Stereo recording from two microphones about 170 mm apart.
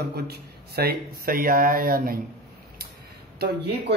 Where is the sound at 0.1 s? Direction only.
65° right (ahead or behind).